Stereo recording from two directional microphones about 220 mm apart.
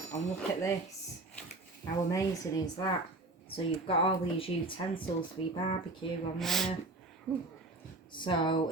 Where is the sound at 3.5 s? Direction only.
25° left (ahead or behind).